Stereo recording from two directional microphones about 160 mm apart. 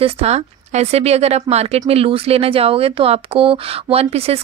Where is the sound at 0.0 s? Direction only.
40° right (ahead or behind).